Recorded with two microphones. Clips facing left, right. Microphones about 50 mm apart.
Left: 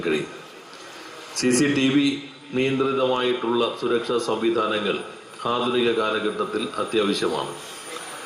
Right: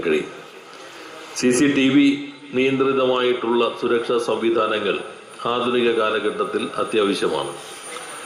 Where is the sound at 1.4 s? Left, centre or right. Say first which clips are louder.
Right 3 dB; right.